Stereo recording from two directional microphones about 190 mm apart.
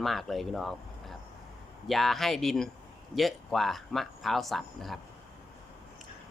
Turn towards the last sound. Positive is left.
turn(degrees=0)  # may be behind; listen again after turning